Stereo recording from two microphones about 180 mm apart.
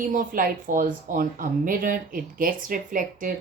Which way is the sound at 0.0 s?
50° right (ahead or behind).